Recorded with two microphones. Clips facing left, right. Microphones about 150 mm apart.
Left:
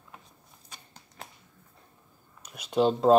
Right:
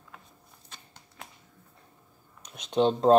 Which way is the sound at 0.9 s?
35° left (ahead or behind).